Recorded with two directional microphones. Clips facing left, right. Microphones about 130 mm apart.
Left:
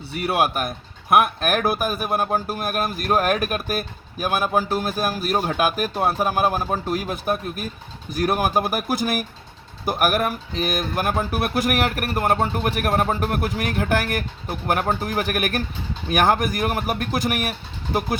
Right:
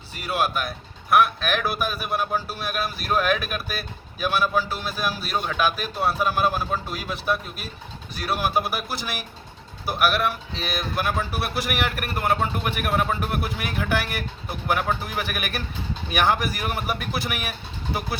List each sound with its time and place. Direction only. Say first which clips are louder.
0.1 s a man's voice: left 4 dB; 60° left (ahead or behind); by 17.5 s 45° left (ahead or behind)